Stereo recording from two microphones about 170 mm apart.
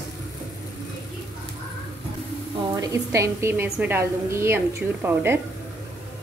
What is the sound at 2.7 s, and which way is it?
A woman's voice, 20° right (ahead or behind).